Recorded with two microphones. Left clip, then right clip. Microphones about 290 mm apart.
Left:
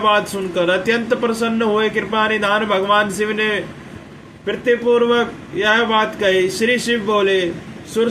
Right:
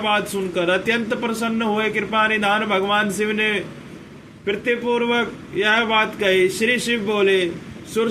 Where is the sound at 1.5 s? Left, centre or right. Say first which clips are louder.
Left 4 dB; centre.